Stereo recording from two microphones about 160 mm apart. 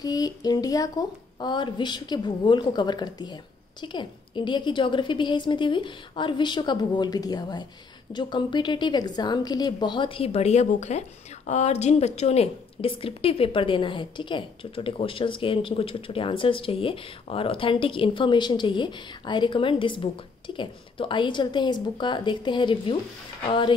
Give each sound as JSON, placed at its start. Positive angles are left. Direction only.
{"t": 0.0, "sound": "a woman's voice", "side_deg": 25}